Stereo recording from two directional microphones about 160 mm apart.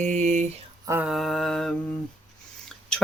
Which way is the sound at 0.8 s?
15° right (ahead or behind).